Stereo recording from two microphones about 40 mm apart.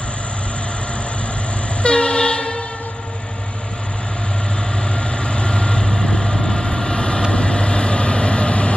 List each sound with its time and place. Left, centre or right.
1.8 s train: left
4.9 s vehicle: left